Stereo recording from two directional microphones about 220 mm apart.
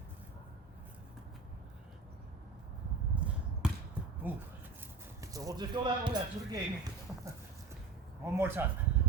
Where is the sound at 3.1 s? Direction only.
5° right (ahead or behind).